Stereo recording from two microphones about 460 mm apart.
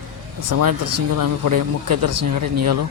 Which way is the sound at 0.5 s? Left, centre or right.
Right.